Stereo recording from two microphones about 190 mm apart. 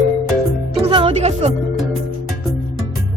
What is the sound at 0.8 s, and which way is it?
Music, 30° right (ahead or behind).